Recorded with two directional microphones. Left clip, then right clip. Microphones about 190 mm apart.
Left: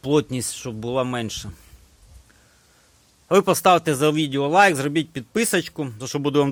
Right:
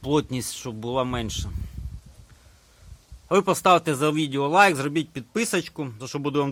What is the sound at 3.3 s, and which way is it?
Speech, 20° left (ahead or behind).